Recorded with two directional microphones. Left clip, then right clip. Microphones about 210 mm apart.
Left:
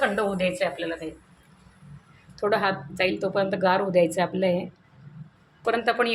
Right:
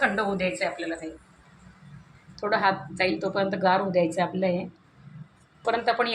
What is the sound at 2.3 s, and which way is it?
A woman's voice, 20° left (ahead or behind).